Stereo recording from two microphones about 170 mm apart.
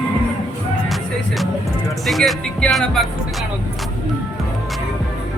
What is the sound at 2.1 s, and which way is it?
Speech, centre (ahead or behind).